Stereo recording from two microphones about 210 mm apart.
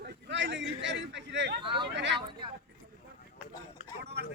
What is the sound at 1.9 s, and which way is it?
Speech, 55° right (ahead or behind).